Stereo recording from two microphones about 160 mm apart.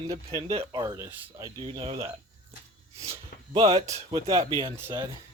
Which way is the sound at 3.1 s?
40° right (ahead or behind).